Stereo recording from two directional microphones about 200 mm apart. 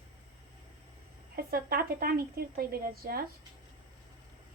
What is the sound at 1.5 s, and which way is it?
A woman's voice, 50° right (ahead or behind).